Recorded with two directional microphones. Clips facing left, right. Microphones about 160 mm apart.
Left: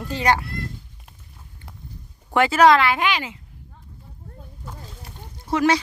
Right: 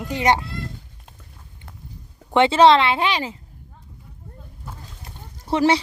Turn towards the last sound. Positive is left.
turn(degrees=-30)  # may be behind; listen again after turning